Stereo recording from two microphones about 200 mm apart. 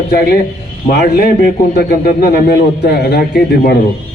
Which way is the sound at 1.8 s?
50° left (ahead or behind).